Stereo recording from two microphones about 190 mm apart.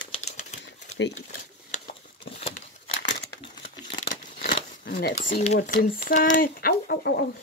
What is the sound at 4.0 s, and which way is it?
Scissors, 40° left (ahead or behind).